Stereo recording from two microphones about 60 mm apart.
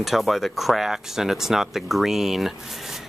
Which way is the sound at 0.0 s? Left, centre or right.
Centre.